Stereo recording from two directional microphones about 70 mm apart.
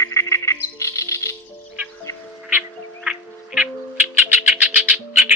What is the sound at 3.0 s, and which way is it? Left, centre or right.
Music, centre.